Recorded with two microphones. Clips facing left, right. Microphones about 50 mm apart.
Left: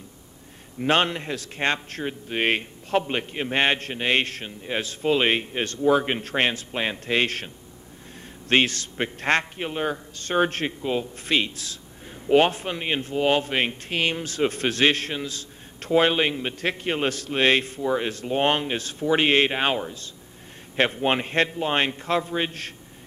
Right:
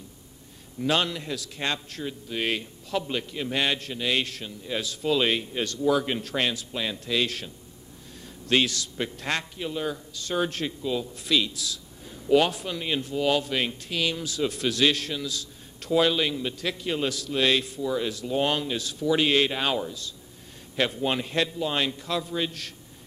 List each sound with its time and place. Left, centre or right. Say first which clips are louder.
0.7 s speech: left 4 dB; left